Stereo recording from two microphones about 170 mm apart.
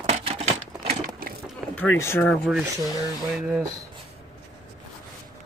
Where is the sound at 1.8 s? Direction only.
10° left (ahead or behind).